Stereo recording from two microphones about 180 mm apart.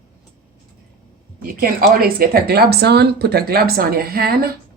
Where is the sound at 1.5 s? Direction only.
55° right (ahead or behind).